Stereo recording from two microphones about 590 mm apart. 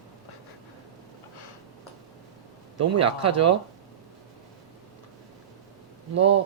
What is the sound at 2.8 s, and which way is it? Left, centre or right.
Speech, right.